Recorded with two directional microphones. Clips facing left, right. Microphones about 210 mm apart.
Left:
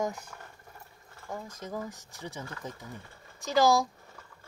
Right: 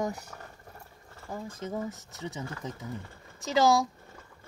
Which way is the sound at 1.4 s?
25° right (ahead or behind).